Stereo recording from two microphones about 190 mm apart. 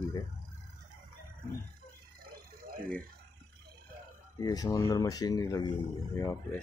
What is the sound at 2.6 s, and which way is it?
Speech, 50° right (ahead or behind).